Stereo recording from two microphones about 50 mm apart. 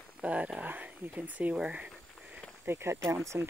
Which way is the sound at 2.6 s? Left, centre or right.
Right.